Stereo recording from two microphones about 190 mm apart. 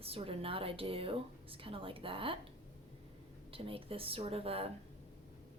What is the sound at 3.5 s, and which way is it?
A woman's voice, 30° right (ahead or behind).